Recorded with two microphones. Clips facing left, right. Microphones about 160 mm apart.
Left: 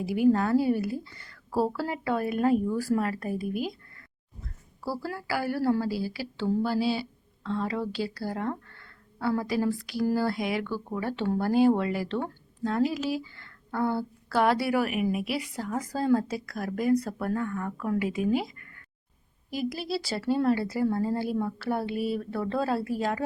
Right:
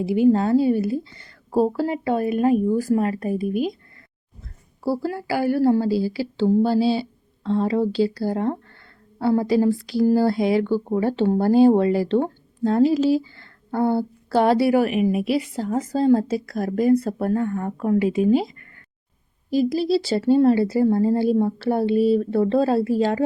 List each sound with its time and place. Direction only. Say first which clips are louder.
0.0 s speech: right 6 dB; 25° right (ahead or behind)
4.8 s speech: right 9 dB; 25° right (ahead or behind)